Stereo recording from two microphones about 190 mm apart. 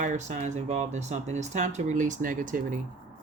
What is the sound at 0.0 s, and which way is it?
Speech, 40° right (ahead or behind).